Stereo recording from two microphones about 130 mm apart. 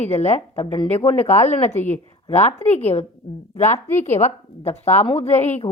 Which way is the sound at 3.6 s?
20° left (ahead or behind).